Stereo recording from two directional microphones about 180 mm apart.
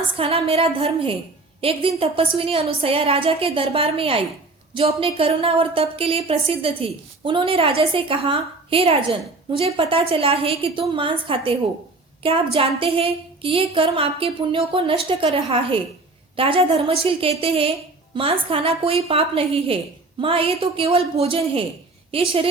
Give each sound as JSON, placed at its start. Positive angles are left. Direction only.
{"t": 0.2, "sound": "a woman's voice", "side_deg": -30}